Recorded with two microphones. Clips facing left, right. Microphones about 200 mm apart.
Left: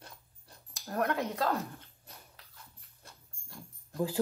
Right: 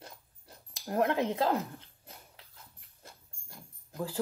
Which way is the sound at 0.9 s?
20° right (ahead or behind).